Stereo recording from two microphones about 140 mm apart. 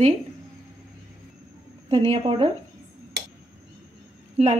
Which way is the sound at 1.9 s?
40° right (ahead or behind).